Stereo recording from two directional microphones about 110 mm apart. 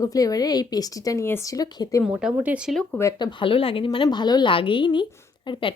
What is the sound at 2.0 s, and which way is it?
Speech, 5° right (ahead or behind).